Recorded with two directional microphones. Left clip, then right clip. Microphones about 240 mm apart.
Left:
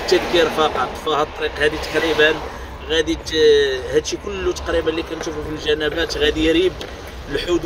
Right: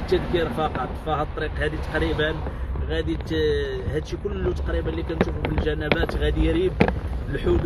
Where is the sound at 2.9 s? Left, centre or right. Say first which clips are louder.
Left 8 dB; centre.